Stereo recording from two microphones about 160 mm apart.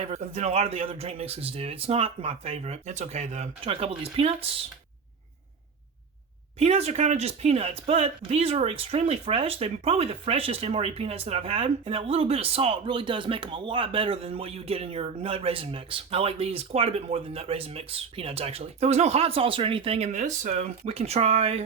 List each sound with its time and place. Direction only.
0.1 s speech: 45° right (ahead or behind)
6.6 s speech: 40° right (ahead or behind)